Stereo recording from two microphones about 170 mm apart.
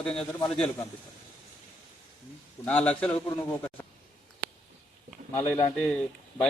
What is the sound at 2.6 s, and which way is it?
Speech, 5° left (ahead or behind).